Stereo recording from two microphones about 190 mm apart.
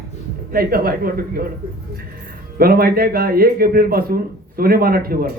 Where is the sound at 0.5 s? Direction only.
50° right (ahead or behind).